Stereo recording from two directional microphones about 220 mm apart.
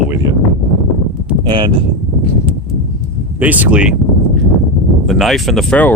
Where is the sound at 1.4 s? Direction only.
20° right (ahead or behind).